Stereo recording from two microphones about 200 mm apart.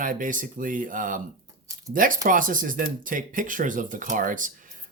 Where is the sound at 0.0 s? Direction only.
40° right (ahead or behind).